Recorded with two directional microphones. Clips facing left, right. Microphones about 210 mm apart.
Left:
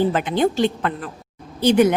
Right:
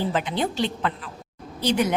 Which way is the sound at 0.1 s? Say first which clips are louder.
Left 6 dB; 50° left (ahead or behind).